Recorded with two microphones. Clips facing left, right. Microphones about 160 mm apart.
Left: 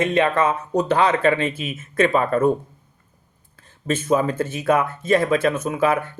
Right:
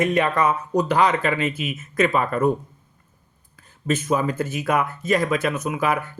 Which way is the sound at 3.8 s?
30° left (ahead or behind).